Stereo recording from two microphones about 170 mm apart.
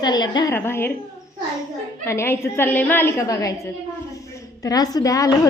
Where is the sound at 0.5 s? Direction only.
15° left (ahead or behind).